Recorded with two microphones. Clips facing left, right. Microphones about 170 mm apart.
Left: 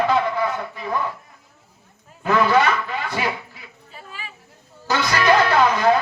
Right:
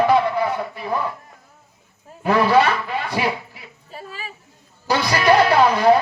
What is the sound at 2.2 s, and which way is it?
Speech, 30° right (ahead or behind).